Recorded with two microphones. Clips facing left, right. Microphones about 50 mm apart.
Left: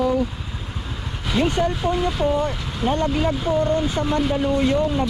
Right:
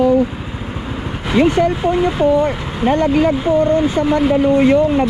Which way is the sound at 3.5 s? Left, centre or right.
Right.